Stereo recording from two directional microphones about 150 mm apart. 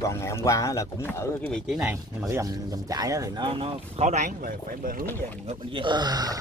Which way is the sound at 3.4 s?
40° right (ahead or behind).